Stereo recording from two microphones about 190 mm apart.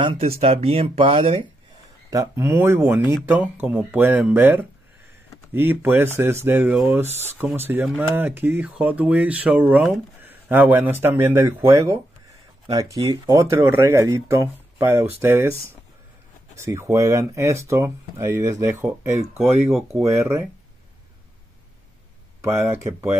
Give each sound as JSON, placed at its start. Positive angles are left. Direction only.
{"t": 0.0, "sound": "speech", "side_deg": -30}
{"t": 2.0, "sound": "speech", "side_deg": -15}
{"t": 16.5, "sound": "speech", "side_deg": -15}
{"t": 22.4, "sound": "speech", "side_deg": -15}